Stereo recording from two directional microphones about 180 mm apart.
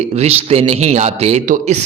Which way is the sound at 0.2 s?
35° right (ahead or behind).